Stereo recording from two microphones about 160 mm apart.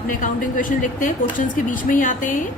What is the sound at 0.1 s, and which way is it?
A woman's voice, 55° left (ahead or behind).